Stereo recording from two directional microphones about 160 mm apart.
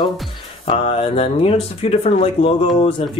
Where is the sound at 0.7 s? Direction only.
40° left (ahead or behind).